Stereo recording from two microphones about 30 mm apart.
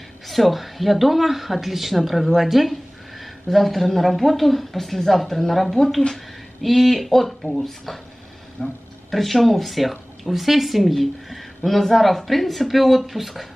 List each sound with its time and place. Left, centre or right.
0.3 s speech: centre
8.6 s speech: left
9.1 s speech: centre